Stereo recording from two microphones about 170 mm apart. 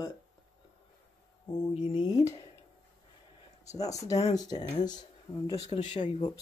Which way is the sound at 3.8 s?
20° left (ahead or behind).